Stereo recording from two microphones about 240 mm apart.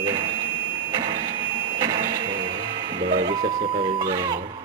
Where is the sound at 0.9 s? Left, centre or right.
Centre.